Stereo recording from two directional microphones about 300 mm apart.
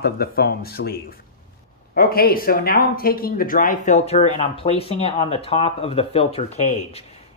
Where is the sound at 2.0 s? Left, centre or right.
Left.